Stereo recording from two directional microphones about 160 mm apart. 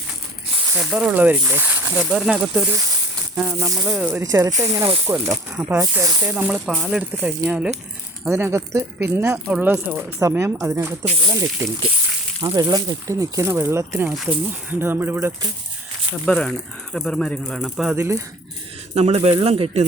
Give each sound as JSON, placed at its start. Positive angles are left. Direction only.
{"t": 0.8, "sound": "speech", "side_deg": -5}
{"t": 4.5, "sound": "speech", "side_deg": -40}
{"t": 5.0, "sound": "speech", "side_deg": -15}
{"t": 6.3, "sound": "speech", "side_deg": -10}
{"t": 14.1, "sound": "speech", "side_deg": -5}
{"t": 16.2, "sound": "speech", "side_deg": 5}
{"t": 18.9, "sound": "speech", "side_deg": -40}